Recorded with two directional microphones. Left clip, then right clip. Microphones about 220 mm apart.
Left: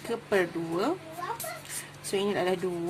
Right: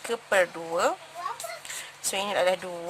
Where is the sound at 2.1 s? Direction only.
30° right (ahead or behind).